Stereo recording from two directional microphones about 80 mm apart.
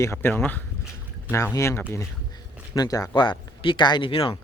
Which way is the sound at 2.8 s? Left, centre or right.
Left.